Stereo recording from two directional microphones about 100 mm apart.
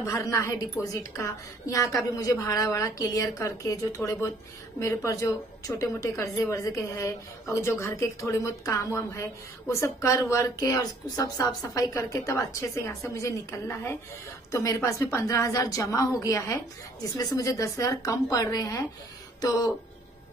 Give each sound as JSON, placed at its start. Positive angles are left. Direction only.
{"t": 0.0, "sound": "a woman's voice", "side_deg": 30}